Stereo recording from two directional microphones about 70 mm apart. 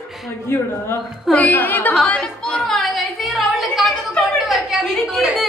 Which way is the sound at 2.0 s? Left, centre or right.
Centre.